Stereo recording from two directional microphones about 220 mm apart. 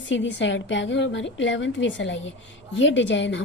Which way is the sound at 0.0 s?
55° left (ahead or behind).